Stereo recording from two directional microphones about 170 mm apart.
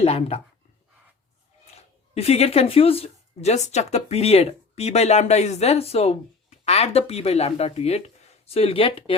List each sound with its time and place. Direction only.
0.0 s speech: 35° left (ahead or behind)
2.1 s speech: 35° left (ahead or behind)